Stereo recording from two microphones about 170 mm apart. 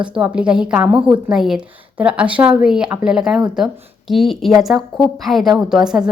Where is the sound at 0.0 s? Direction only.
5° right (ahead or behind).